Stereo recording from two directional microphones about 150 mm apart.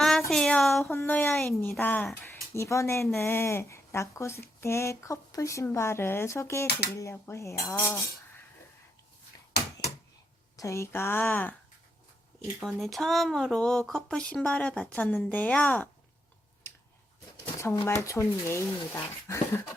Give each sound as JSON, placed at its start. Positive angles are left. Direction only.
{"t": 0.3, "sound": "speech", "side_deg": 5}
{"t": 0.9, "sound": "speech", "side_deg": 15}
{"t": 6.7, "sound": "speech", "side_deg": 90}
{"t": 6.9, "sound": "speech", "side_deg": 20}
{"t": 10.6, "sound": "speech", "side_deg": 20}
{"t": 12.5, "sound": "speech", "side_deg": 0}
{"t": 16.7, "sound": "a sound", "side_deg": 15}
{"t": 17.4, "sound": "speech", "side_deg": 15}